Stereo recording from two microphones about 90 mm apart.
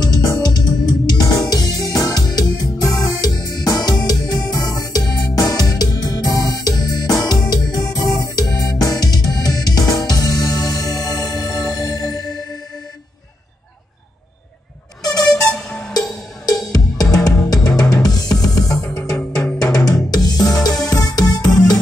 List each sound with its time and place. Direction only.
0.0 s music: 45° left (ahead or behind)
11.4 s music: 5° left (ahead or behind)
11.7 s music: 45° left (ahead or behind)
15.4 s music: 5° left (ahead or behind)
15.9 s music: 45° left (ahead or behind)